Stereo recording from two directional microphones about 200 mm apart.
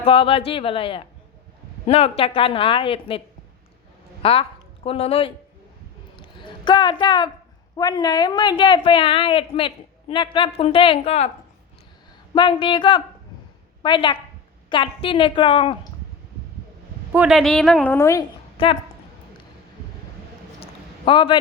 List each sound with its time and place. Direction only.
0.0 s a woman's voice: 25° left (ahead or behind)
4.2 s a woman's voice: 25° left (ahead or behind)
6.4 s a woman's voice: 25° left (ahead or behind)
12.3 s a woman's voice: 25° left (ahead or behind)
17.1 s a woman's voice: 5° right (ahead or behind); by 18.3 s 15° left (ahead or behind)
18.5 s speech: 30° left (ahead or behind)
20.6 s a sound: 25° left (ahead or behind)